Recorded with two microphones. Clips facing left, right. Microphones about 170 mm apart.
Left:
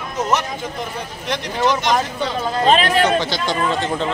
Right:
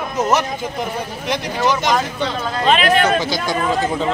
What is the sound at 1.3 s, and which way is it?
Speech, 10° right (ahead or behind).